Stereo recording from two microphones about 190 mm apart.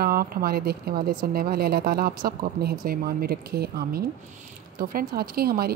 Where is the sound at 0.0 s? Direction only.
50° right (ahead or behind).